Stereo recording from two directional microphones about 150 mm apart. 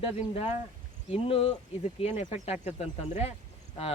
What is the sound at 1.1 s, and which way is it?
Speech, 40° left (ahead or behind).